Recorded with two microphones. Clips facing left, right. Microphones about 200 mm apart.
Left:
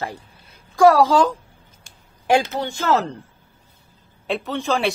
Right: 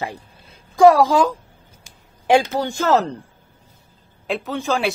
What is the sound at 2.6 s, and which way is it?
Speech, 40° right (ahead or behind).